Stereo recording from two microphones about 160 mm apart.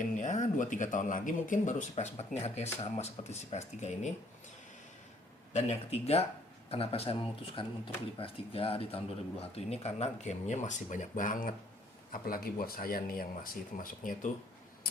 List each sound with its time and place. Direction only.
0.2 s speech: 50° left (ahead or behind)
5.5 s speech: 40° left (ahead or behind); by 14.3 s 55° left (ahead or behind)